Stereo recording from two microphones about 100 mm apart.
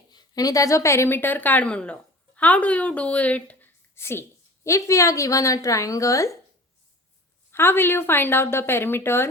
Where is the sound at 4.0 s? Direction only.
25° left (ahead or behind).